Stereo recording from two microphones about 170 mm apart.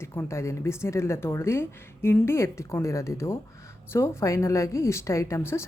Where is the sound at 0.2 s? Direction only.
15° left (ahead or behind).